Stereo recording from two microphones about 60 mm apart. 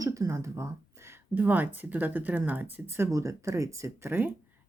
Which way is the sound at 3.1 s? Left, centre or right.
Right.